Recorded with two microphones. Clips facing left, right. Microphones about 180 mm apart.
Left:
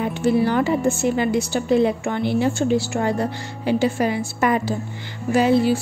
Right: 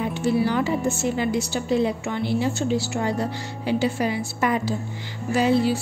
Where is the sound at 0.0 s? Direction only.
55° left (ahead or behind).